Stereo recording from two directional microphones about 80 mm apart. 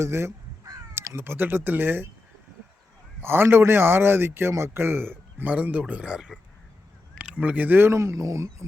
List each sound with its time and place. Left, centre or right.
0.0 s caw: right
1.1 s a man's voice: right
3.2 s a man's voice: right